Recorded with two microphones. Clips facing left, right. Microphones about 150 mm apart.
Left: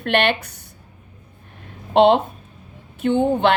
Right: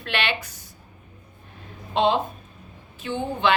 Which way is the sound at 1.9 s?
65° left (ahead or behind).